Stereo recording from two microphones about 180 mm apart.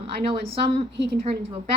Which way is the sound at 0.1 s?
30° right (ahead or behind).